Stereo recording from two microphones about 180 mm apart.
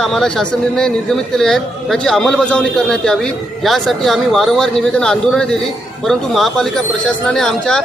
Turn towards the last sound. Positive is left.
turn(degrees=0)  # may be behind; listen again after turning